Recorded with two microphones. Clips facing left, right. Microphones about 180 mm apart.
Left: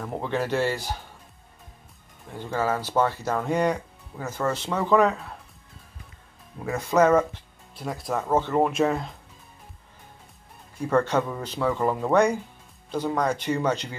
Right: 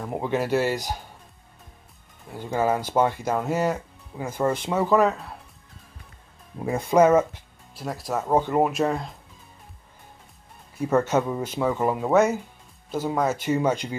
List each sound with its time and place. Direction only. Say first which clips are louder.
0.0 s speech: right 2 dB; 10° right (ahead or behind)
2.3 s speech: right 3 dB; 15° right (ahead or behind)
6.6 s speech: right 3 dB; 25° right (ahead or behind)
7.0 s speech: right 2 dB; 10° right (ahead or behind)
8.3 s speech: right 1 dB; 15° right (ahead or behind)
10.8 s speech: right 1 dB; 5° right (ahead or behind)